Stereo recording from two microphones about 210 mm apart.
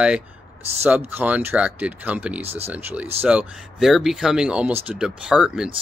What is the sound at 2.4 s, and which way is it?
Speech, 30° right (ahead or behind).